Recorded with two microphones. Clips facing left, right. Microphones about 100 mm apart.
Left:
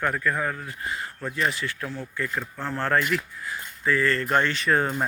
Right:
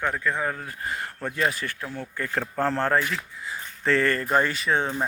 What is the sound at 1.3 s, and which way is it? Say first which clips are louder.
Speech: even; 45° right (ahead or behind).